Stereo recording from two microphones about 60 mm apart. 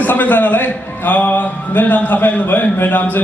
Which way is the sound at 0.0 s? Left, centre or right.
Left.